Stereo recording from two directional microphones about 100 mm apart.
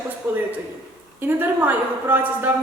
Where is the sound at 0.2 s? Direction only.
25° right (ahead or behind).